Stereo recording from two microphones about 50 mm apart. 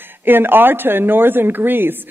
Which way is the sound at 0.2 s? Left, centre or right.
Right.